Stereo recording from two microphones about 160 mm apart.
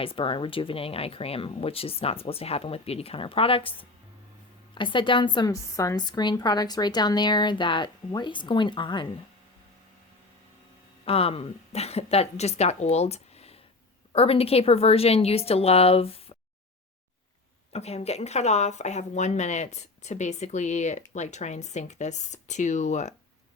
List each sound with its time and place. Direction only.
0.0 s a woman's voice: 35° left (ahead or behind)
11.0 s a woman's voice: 35° left (ahead or behind)
17.7 s speech: 40° left (ahead or behind)